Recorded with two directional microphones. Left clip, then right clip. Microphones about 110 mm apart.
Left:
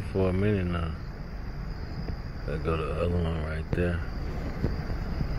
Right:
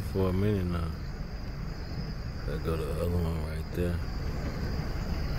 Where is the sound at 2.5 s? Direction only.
10° right (ahead or behind).